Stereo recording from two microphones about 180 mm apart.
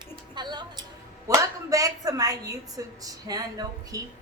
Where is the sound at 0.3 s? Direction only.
25° right (ahead or behind).